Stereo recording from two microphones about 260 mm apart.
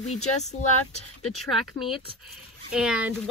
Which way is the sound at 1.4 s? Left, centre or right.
Centre.